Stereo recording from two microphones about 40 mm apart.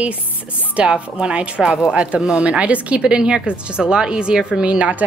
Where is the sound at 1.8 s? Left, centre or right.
Centre.